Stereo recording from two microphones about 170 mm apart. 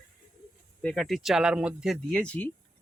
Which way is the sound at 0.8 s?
5° left (ahead or behind).